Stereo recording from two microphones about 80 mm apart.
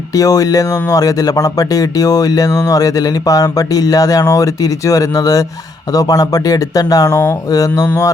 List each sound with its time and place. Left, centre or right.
0.1 s speech: left